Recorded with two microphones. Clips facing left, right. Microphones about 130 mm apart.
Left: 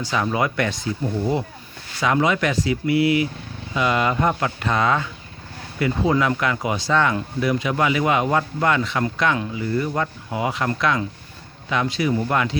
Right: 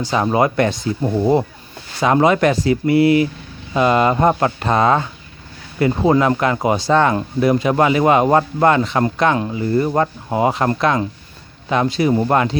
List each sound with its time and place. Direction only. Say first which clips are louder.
0.1 s a man's voice: right 6 dB; 35° right (ahead or behind)